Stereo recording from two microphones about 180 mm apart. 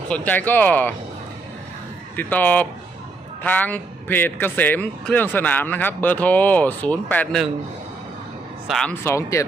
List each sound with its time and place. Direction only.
0.1 s a man's voice: 10° left (ahead or behind)
2.1 s a man's voice: 10° left (ahead or behind)
8.6 s a man's voice: centre (ahead or behind)
9.0 s a man's voice: 15° left (ahead or behind)